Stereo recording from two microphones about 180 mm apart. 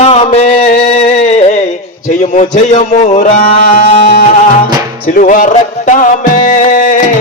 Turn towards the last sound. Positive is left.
turn(degrees=45)  # may be behind; listen again after turning